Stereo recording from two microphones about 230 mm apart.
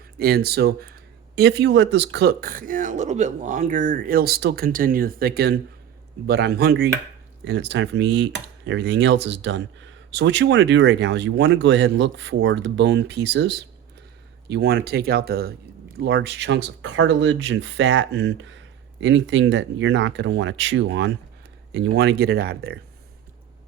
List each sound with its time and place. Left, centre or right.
0.2 s speech: right